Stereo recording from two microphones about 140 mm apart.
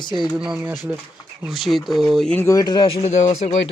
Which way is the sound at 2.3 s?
20° left (ahead or behind).